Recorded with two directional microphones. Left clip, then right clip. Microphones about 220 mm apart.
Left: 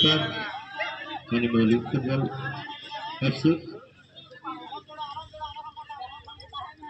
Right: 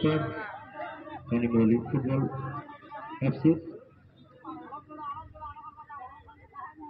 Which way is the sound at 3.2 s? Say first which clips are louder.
Left 1 dB; 60° left (ahead or behind).